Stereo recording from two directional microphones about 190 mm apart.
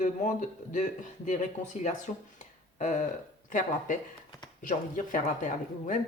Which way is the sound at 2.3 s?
40° left (ahead or behind).